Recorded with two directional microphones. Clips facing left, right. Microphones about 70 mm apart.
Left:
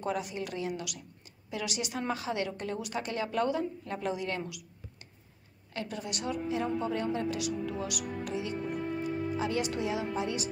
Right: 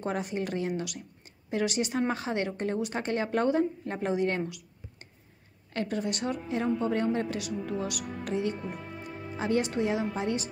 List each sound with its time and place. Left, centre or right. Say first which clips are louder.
0.0 s a woman's voice: right 2 dB; right
5.7 s a woman's voice: right 6 dB; right